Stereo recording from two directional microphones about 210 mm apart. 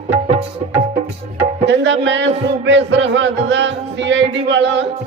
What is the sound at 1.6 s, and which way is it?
Music, 55° right (ahead or behind).